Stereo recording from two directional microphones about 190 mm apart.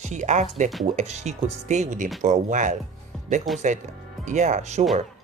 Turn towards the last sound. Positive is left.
turn(degrees=-35)  # may be behind; listen again after turning